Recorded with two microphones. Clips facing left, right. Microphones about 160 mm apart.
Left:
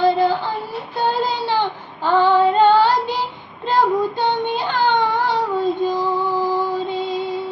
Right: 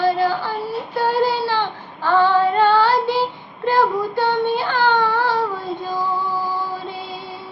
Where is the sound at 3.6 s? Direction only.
20° left (ahead or behind).